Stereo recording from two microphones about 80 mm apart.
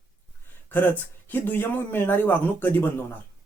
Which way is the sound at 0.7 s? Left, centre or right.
Left.